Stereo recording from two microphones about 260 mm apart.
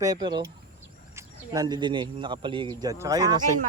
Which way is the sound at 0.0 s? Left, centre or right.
Centre.